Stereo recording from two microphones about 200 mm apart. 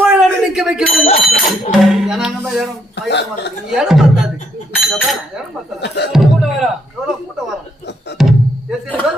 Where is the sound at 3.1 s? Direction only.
60° left (ahead or behind).